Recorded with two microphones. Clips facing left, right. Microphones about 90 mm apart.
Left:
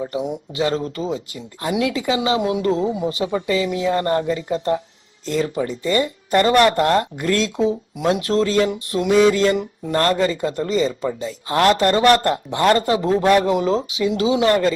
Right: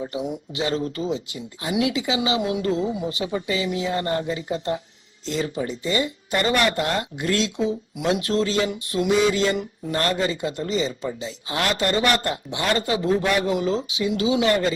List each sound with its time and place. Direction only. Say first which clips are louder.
0.0 s a woman's voice: left 4 dB; 30° left (ahead or behind)
2.4 s a woman's voice: left 4 dB; 30° left (ahead or behind)
9.1 s a woman's voice: left 6 dB; 45° left (ahead or behind)